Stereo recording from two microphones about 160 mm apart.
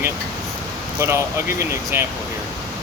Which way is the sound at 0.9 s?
15° right (ahead or behind).